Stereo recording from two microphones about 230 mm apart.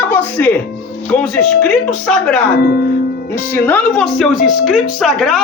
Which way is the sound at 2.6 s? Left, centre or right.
Left.